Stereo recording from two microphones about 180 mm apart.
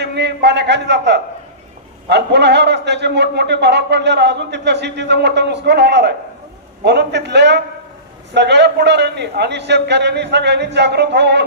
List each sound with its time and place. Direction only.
0.0 s a man's voice: 70° right (ahead or behind)